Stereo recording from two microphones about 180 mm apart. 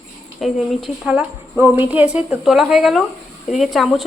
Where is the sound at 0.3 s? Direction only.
Centre (ahead or behind).